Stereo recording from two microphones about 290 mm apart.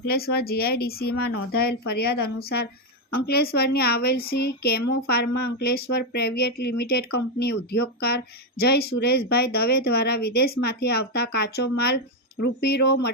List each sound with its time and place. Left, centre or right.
0.0 s speech: left